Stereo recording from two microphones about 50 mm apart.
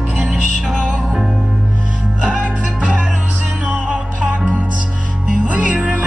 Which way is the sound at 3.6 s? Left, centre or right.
Right.